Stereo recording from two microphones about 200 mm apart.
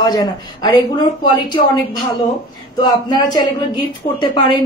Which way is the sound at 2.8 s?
20° left (ahead or behind).